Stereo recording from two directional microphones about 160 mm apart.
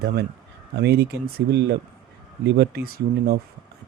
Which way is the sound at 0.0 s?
80° right.